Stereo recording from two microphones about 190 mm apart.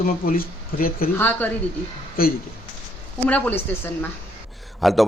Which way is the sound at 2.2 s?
50° left (ahead or behind).